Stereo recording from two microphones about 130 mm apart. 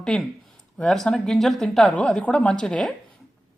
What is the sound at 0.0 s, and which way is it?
Speech, centre (ahead or behind).